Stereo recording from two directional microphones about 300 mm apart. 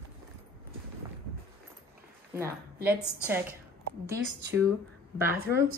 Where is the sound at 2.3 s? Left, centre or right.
Centre.